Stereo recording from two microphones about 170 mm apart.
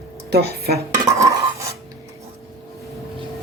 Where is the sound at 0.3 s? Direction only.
65° right (ahead or behind).